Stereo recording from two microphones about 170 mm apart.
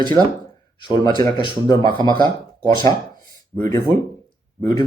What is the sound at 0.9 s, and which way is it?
Speech, 20° left (ahead or behind).